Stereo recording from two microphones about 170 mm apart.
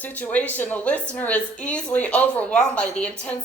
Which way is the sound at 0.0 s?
10° left (ahead or behind).